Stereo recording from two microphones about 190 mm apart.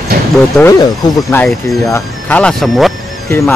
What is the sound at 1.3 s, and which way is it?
Speech, 10° left (ahead or behind).